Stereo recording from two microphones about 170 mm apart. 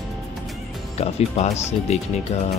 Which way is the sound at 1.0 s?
40° left (ahead or behind).